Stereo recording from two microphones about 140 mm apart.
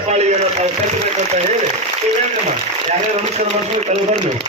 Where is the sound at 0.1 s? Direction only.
55° right (ahead or behind).